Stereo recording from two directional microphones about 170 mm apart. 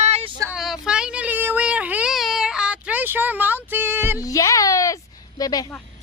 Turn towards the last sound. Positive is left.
turn(degrees=20)  # may be behind; listen again after turning